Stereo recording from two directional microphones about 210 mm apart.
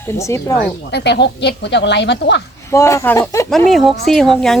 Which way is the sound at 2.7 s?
15° left (ahead or behind).